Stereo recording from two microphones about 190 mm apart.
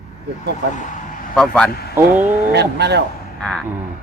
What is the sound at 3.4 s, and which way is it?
Speech, 5° left (ahead or behind).